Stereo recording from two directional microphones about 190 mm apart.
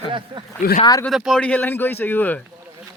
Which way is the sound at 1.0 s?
Centre (ahead or behind).